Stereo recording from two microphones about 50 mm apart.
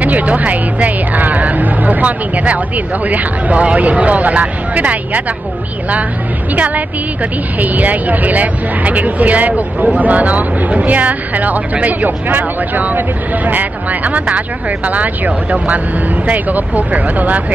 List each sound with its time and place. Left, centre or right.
0.0 s music: right
3.1 s speech: right
6.5 s speech: right